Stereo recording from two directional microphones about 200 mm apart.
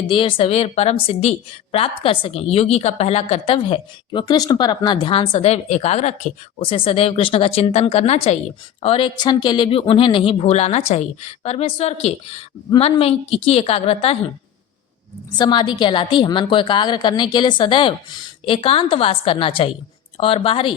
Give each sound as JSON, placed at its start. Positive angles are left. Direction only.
{"t": 0.1, "sound": "a woman's voice", "side_deg": 25}
{"t": 15.4, "sound": "a woman's voice", "side_deg": 20}